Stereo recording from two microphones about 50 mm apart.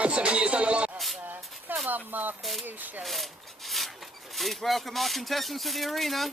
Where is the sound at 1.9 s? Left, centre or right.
Right.